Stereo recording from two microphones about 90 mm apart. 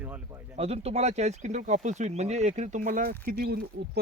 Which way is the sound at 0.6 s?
90° right.